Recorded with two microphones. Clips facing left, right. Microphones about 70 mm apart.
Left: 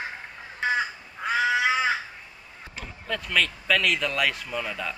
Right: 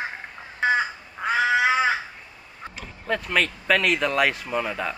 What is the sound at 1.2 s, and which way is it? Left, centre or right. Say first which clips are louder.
Crow: right 3 dB; centre.